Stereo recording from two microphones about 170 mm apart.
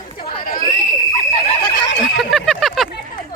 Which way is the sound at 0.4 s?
55° left (ahead or behind).